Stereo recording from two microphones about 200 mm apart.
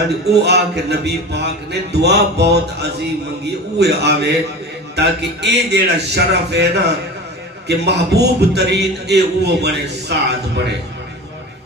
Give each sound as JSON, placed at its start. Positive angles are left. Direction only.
{"t": 0.4, "sound": "a man's voice", "side_deg": -55}